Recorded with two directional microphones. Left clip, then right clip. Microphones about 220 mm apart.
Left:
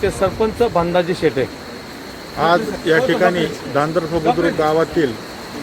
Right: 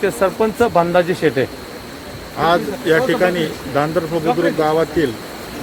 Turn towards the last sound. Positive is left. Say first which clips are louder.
# even
turn(degrees=0)  # may be behind; listen again after turning